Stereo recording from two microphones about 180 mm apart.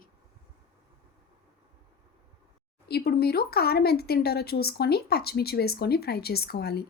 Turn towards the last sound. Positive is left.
turn(degrees=65)  # may be behind; listen again after turning